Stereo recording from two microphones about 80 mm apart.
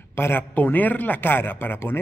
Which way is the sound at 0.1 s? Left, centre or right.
Left.